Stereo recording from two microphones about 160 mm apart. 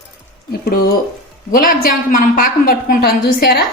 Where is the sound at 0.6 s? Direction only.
70° left (ahead or behind).